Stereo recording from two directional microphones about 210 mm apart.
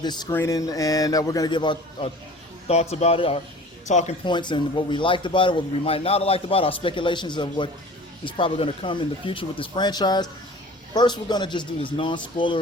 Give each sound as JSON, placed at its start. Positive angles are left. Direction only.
{"t": 0.0, "sound": "a man's voice", "side_deg": 20}
{"t": 4.3, "sound": "a man's voice", "side_deg": 20}